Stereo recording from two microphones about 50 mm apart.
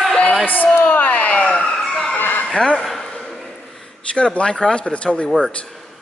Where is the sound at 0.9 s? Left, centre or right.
Left.